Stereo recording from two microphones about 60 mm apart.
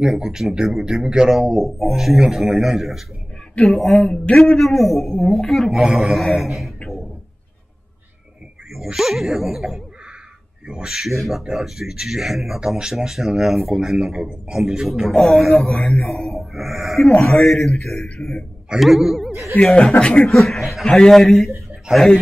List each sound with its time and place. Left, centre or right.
0.0 s speech: centre
8.7 s a man's voice: centre
20.0 s speech: centre
20.2 s speech: centre
20.8 s a man's voice: centre
21.9 s speech: centre